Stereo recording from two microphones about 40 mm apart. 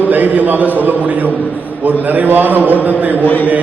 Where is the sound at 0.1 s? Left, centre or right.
Right.